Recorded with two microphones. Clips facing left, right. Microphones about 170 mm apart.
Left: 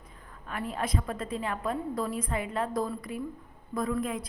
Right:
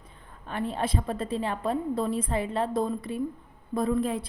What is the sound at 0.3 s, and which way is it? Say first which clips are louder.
A woman's voice: right 4 dB; 30° right (ahead or behind).